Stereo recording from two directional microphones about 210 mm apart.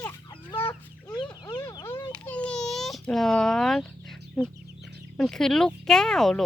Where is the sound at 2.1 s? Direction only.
5° left (ahead or behind).